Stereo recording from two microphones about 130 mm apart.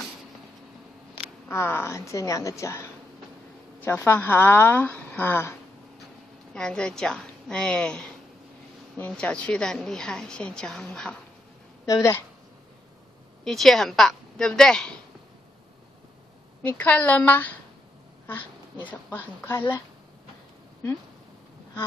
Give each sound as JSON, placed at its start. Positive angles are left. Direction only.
{"t": 1.5, "sound": "a woman's voice", "side_deg": 20}
{"t": 6.5, "sound": "a woman's voice", "side_deg": 5}
{"t": 11.9, "sound": "a woman's voice", "side_deg": 20}
{"t": 13.4, "sound": "a woman's voice", "side_deg": 0}
{"t": 16.6, "sound": "a woman's voice", "side_deg": 10}